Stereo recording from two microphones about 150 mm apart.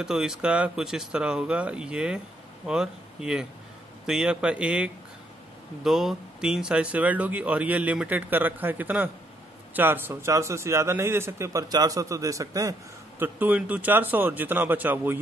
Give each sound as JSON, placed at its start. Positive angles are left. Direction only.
{"t": 0.0, "sound": "a man's voice", "side_deg": -5}
{"t": 13.2, "sound": "speech", "side_deg": -10}